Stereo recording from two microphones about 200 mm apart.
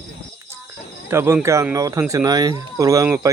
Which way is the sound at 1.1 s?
10° right (ahead or behind).